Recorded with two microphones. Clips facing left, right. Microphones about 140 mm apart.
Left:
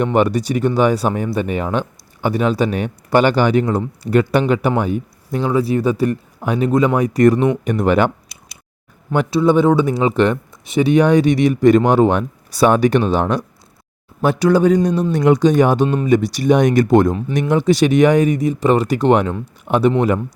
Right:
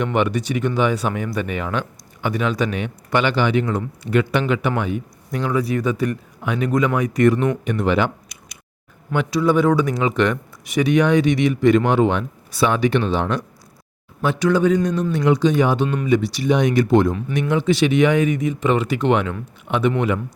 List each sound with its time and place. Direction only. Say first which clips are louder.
0.0 s speech: left 4 dB; 35° left (ahead or behind)
9.3 s a man's voice: left 3 dB; 25° left (ahead or behind)
15.2 s speech: left 4 dB; 45° left (ahead or behind)
17.2 s speech: left 3 dB; 30° left (ahead or behind)